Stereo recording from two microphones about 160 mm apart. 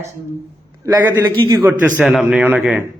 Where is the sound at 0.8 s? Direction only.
15° right (ahead or behind).